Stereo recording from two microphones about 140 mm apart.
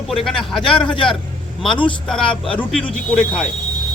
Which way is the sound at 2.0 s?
5° left (ahead or behind).